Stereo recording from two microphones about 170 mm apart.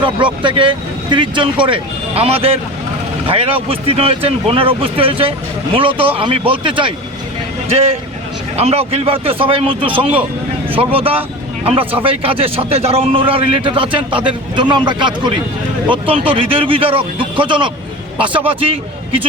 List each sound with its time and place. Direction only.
0.4 s a man's voice: 30° right (ahead or behind)
8.5 s a man's voice: 35° right (ahead or behind)